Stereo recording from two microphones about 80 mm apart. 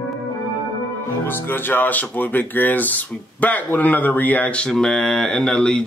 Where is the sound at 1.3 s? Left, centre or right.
Left.